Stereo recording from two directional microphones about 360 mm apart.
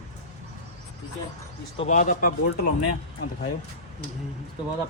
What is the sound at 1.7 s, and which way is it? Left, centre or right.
Speech, centre.